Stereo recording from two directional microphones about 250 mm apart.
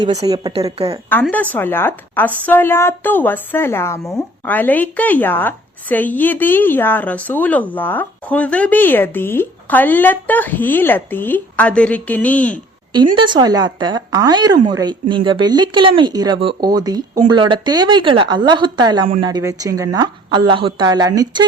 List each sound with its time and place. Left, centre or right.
0.0 s a woman's voice: centre
1.1 s a woman's voice: centre
13.1 s speech: centre